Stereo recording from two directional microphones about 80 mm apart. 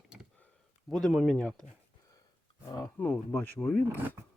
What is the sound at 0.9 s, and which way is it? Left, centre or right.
Speech, centre.